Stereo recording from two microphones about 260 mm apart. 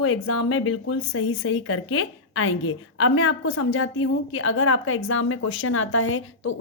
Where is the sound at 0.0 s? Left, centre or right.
Left.